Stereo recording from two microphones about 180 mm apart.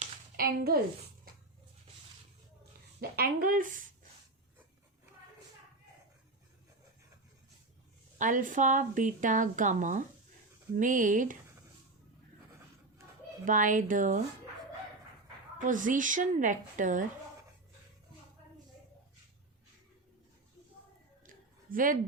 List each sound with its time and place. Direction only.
0.0 s a sound: 55° right (ahead or behind)
3.0 s a woman's voice: 55° right (ahead or behind)
8.2 s a woman's voice: 45° right (ahead or behind)
13.4 s a woman's voice: 45° right (ahead or behind)
15.6 s a woman's voice: 45° right (ahead or behind)
21.2 s a sound: 50° right (ahead or behind)